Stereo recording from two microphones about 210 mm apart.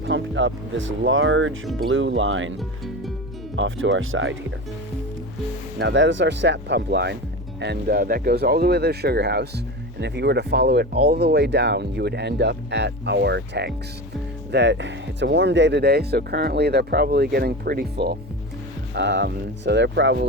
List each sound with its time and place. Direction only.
0.0 s speech: 60° right (ahead or behind)
2.6 s speech: centre (ahead or behind)
3.5 s speech: 65° right (ahead or behind)
5.8 s speech: 60° right (ahead or behind)